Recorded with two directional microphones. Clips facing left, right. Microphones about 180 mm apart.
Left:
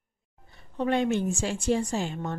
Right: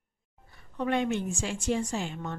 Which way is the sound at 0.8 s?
35° left (ahead or behind).